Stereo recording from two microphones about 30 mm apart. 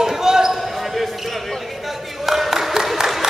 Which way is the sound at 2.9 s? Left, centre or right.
Centre.